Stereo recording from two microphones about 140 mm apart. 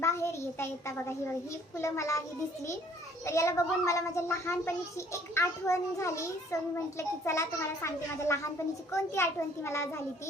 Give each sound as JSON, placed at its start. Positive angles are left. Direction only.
{"t": 0.0, "sound": "a child's voice", "side_deg": 20}
{"t": 3.2, "sound": "a child's voice", "side_deg": 20}